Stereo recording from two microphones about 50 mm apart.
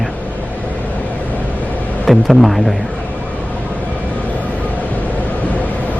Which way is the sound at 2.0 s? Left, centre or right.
Centre.